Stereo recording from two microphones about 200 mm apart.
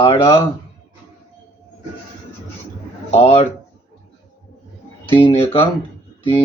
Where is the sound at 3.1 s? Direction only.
30° left (ahead or behind).